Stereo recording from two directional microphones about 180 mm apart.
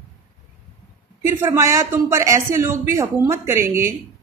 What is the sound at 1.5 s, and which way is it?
Speech, 15° right (ahead or behind).